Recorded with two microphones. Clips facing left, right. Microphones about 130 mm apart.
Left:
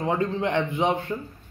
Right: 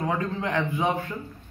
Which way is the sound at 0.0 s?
25° left (ahead or behind).